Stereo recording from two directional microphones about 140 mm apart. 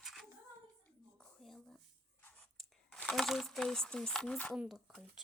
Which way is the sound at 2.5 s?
5° left (ahead or behind).